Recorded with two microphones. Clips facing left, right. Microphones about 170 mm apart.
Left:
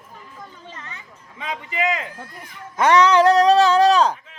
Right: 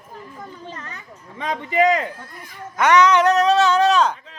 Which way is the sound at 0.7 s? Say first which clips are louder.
Right 3 dB; 40° right (ahead or behind).